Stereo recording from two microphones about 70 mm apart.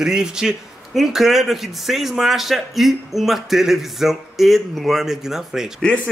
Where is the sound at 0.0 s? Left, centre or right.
Centre.